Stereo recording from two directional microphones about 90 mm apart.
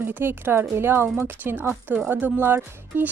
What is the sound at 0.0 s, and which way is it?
Speech, 25° right (ahead or behind).